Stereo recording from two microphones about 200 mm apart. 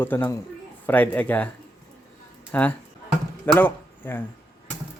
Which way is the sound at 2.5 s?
5° left (ahead or behind).